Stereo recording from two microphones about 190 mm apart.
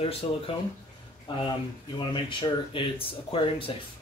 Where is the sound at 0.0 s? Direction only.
30° left (ahead or behind).